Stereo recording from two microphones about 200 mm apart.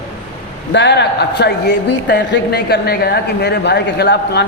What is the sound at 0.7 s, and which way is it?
Speech, 60° left (ahead or behind).